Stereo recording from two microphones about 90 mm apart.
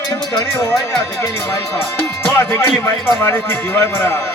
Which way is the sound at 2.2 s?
25° left (ahead or behind).